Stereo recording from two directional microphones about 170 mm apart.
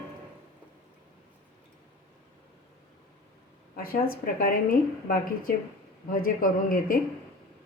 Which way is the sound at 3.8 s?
60° left (ahead or behind).